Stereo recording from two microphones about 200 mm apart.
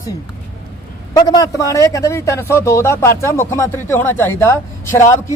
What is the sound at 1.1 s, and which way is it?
Speech, 20° left (ahead or behind).